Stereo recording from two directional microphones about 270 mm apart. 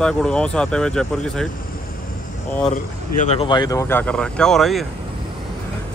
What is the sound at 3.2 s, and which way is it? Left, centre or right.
Speech, left.